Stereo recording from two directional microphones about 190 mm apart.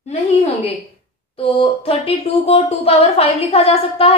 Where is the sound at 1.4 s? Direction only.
30° left (ahead or behind).